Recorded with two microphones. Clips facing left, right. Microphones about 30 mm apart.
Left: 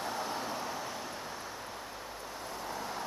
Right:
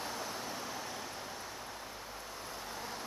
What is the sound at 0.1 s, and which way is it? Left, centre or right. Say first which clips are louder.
Vehicle: left 4 dB; left.